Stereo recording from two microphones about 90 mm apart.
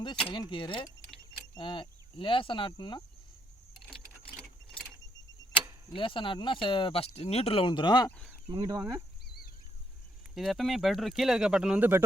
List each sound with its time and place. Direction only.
0.3 s speech: 55° left (ahead or behind)
4.7 s a sound: 10° left (ahead or behind)
5.9 s speech: 70° left (ahead or behind); by 8.0 s 55° left (ahead or behind)
8.5 s speech: 35° right (ahead or behind)
10.3 s speech: centre (ahead or behind)
11.8 s speech: 25° right (ahead or behind)